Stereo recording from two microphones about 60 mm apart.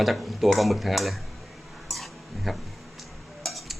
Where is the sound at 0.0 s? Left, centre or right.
Centre.